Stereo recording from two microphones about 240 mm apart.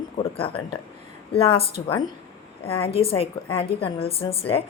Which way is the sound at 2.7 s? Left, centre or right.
Left.